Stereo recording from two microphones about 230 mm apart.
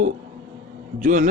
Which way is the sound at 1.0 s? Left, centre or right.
Right.